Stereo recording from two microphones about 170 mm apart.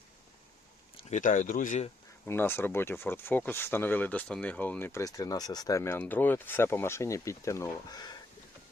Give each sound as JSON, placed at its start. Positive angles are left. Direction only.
{"t": 1.1, "sound": "speech", "side_deg": 50}
{"t": 2.2, "sound": "speech", "side_deg": 15}